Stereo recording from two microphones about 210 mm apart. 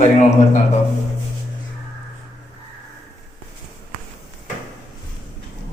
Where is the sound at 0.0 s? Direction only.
35° left (ahead or behind).